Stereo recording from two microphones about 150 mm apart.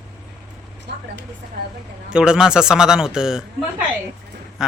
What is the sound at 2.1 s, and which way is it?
Speech, 5° right (ahead or behind).